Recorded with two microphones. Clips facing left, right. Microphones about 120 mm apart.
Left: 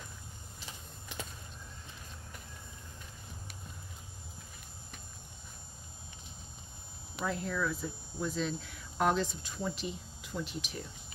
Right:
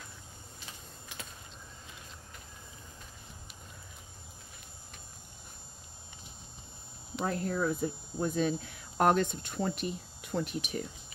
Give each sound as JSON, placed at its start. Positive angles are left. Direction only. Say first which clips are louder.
{"t": 7.2, "sound": "speech", "louder": "right 3 dB", "side_deg": -50}